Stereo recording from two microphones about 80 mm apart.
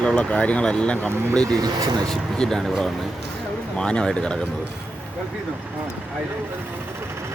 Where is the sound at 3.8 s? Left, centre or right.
Centre.